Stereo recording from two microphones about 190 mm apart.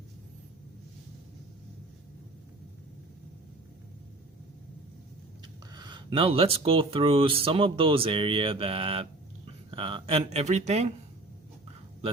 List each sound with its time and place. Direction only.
5.7 s speech: 25° right (ahead or behind)